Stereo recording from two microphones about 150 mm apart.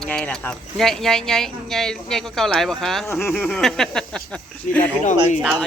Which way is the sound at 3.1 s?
15° left (ahead or behind).